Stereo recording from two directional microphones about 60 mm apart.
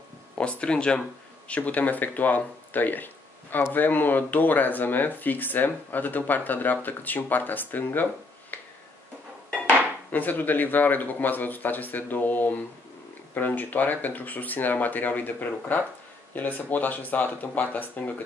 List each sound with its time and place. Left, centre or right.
0.4 s speech: centre
10.1 s speech: left